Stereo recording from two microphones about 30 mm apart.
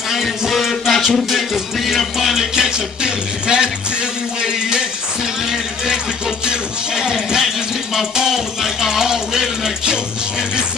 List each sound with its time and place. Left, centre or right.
0.5 s music: centre
2.3 s music: right
7.0 s music: centre